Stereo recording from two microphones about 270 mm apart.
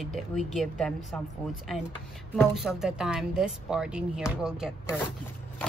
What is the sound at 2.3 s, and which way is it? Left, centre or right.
Speech, centre.